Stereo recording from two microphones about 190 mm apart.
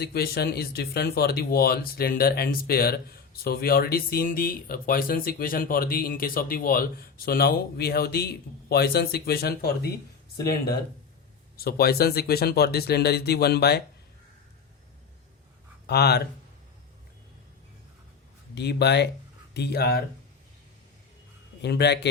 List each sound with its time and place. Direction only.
0.0 s speech: 55° left (ahead or behind)
15.9 s speech: 60° left (ahead or behind)
18.5 s speech: 60° left (ahead or behind)
21.6 s speech: 60° left (ahead or behind)